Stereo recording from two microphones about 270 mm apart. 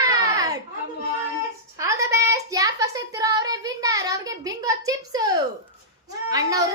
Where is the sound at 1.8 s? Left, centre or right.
Centre.